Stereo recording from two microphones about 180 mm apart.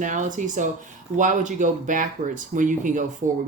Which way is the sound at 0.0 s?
45° right (ahead or behind).